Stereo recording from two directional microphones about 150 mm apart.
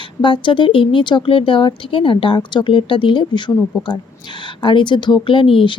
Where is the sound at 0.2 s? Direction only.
35° left (ahead or behind).